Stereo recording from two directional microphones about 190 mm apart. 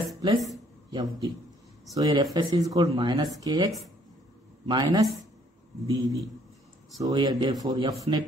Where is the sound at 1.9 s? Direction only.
20° right (ahead or behind).